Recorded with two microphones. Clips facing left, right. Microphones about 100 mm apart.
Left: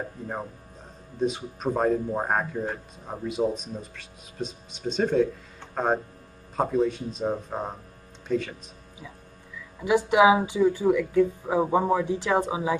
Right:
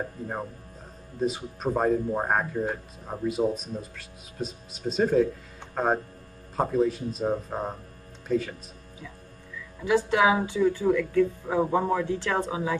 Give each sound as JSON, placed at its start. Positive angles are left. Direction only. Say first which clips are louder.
{"t": 1.2, "sound": "speech", "louder": "left 1 dB", "side_deg": 0}
{"t": 9.8, "sound": "speech", "louder": "left 3 dB", "side_deg": 15}